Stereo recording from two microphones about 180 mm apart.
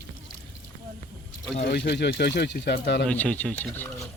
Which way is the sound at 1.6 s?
65° left (ahead or behind).